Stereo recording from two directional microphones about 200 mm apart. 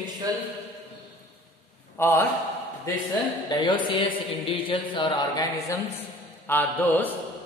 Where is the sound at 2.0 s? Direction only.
10° left (ahead or behind).